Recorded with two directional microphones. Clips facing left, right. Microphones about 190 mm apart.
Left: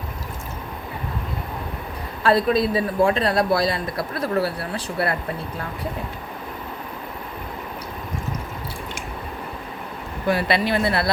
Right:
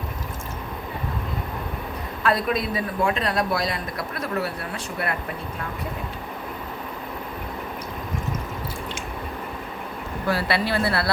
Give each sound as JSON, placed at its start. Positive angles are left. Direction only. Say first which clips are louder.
{"t": 2.2, "sound": "a man's voice", "louder": "left 5 dB", "side_deg": 30}
{"t": 10.2, "sound": "speech", "louder": "left 3 dB", "side_deg": 20}